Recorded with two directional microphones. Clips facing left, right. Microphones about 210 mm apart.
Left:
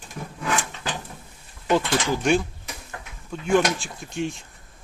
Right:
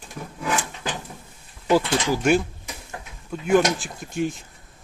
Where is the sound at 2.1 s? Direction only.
5° right (ahead or behind).